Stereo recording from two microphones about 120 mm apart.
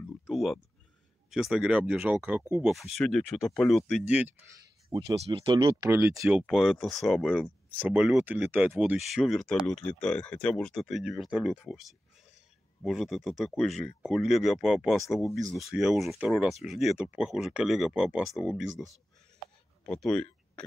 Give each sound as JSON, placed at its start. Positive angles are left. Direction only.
{"t": 0.3, "sound": "a sound", "side_deg": 0}
{"t": 1.3, "sound": "speech", "side_deg": -5}
{"t": 2.6, "sound": "speech", "side_deg": 0}
{"t": 4.1, "sound": "speech", "side_deg": -10}
{"t": 5.2, "sound": "speech", "side_deg": -50}
{"t": 5.6, "sound": "speech", "side_deg": -30}
{"t": 6.3, "sound": "speech", "side_deg": 0}
{"t": 8.9, "sound": "speech", "side_deg": 0}
{"t": 19.8, "sound": "speech", "side_deg": 5}